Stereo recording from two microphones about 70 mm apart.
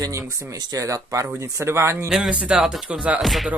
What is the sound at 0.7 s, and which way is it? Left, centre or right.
Speech, right.